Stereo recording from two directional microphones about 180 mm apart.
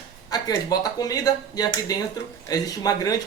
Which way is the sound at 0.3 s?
20° left (ahead or behind).